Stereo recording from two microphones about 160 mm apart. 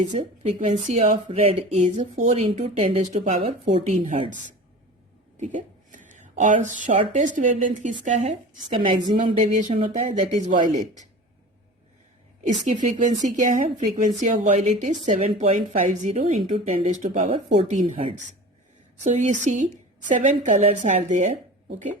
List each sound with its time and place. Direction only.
0.1 s a woman's voice: 45° right (ahead or behind)
3.8 s a woman's voice: 50° right (ahead or behind)
5.4 s a woman's voice: 50° right (ahead or behind)
9.5 s a woman's voice: 50° right (ahead or behind)
12.4 s a woman's voice: 45° right (ahead or behind)
16.4 s speech: 35° right (ahead or behind)
16.6 s a woman's voice: 50° right (ahead or behind)
19.0 s a woman's voice: 50° right (ahead or behind)